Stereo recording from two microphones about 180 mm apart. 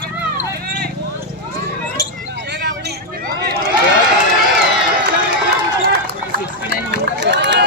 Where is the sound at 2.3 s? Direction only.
70° right (ahead or behind).